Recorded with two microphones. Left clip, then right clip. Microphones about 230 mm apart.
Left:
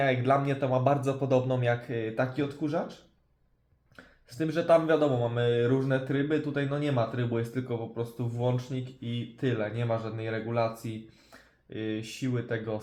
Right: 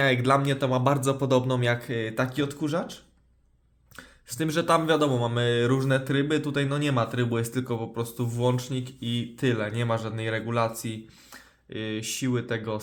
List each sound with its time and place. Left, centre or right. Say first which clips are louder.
0.0 s speech: right 3 dB; right
3.9 s speech: right 3 dB; right